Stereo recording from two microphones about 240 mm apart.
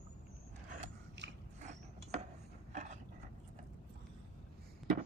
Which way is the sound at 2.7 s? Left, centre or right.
Right.